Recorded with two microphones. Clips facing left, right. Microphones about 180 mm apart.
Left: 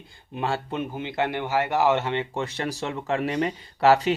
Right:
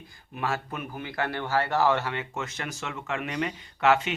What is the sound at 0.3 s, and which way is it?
Speech, 30° left (ahead or behind).